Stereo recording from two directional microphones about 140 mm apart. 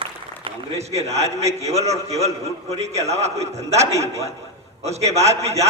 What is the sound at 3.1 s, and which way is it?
A man's voice, 50° right (ahead or behind).